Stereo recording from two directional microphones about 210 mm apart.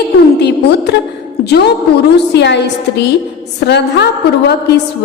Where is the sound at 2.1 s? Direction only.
55° left (ahead or behind).